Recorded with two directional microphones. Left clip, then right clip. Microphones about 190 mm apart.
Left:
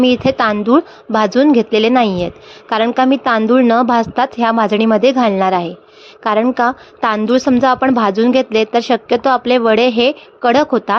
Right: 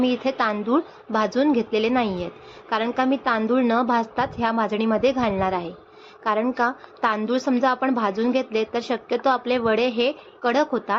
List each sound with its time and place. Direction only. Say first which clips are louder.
0.0 s a woman's voice: left 9 dB; 45° left (ahead or behind)